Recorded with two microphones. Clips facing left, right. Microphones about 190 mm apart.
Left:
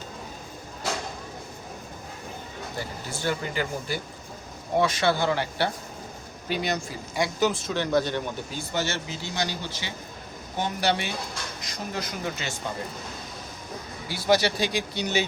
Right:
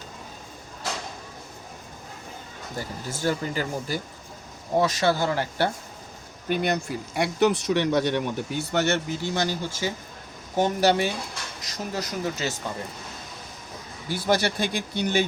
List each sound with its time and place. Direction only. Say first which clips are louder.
2.7 s speech: right 3 dB; 45° right (ahead or behind)
6.5 s speech: right 3 dB; 55° right (ahead or behind); by 12.5 s 40° right (ahead or behind)
14.1 s speech: left 1 dB; 50° right (ahead or behind)